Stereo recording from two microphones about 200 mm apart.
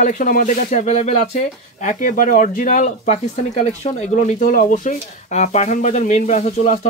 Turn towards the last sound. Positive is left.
turn(degrees=40)  # may be behind; listen again after turning